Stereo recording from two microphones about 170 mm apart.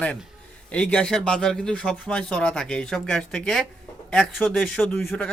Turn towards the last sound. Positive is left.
turn(degrees=5)  # may be behind; listen again after turning